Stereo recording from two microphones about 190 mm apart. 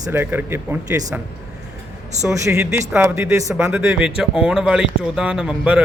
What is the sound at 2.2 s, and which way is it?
A man's voice, 15° right (ahead or behind).